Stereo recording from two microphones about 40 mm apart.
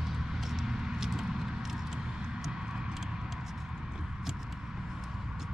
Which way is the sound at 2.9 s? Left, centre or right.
Centre.